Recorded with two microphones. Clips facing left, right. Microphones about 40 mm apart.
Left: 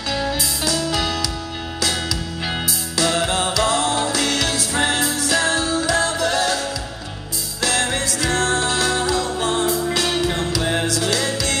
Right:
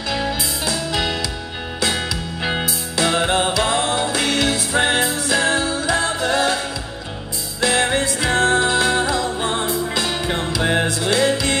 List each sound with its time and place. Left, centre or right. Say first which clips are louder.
0.4 s music: left 1 dB; right
7.6 s music: right 3 dB; right